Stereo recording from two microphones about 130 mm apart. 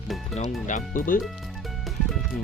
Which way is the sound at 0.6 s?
80° left.